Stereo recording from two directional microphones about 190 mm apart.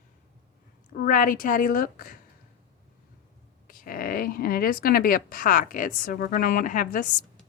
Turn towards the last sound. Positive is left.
turn(degrees=45)  # may be behind; listen again after turning